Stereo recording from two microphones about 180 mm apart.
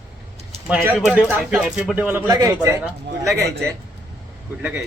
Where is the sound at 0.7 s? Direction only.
10° right (ahead or behind).